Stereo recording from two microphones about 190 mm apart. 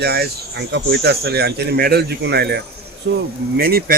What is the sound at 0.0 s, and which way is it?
Speech, 55° right (ahead or behind).